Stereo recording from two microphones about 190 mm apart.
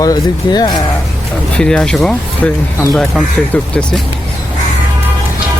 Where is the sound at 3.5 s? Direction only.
5° left (ahead or behind).